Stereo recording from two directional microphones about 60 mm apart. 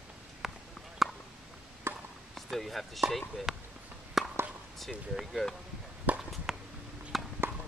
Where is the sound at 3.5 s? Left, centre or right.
Centre.